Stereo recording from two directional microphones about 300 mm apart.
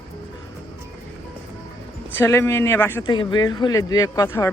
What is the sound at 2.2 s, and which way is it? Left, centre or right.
Speech, centre.